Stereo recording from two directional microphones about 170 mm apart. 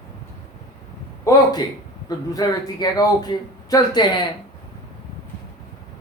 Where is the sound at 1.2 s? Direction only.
25° left (ahead or behind).